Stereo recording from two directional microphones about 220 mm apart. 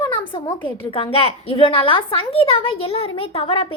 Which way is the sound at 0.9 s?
25° left (ahead or behind).